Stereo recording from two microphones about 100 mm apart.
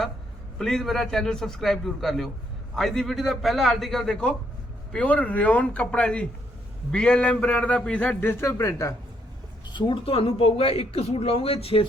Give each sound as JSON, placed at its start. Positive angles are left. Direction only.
{"t": 0.6, "sound": "a man's voice", "side_deg": 5}
{"t": 9.7, "sound": "speech", "side_deg": 55}
{"t": 10.2, "sound": "speech", "side_deg": 75}